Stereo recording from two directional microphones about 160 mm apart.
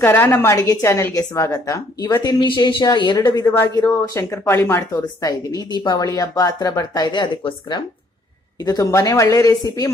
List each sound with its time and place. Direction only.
0.0 s a woman's voice: 15° left (ahead or behind)